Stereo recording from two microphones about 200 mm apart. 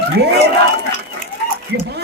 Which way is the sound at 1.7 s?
60° right (ahead or behind).